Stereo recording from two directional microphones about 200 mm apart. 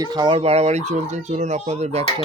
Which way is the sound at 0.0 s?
20° right (ahead or behind).